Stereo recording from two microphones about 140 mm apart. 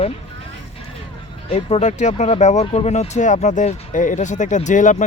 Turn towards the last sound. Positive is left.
turn(degrees=65)  # may be behind; listen again after turning